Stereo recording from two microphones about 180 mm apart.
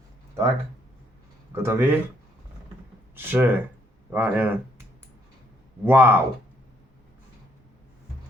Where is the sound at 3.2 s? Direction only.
10° right (ahead or behind).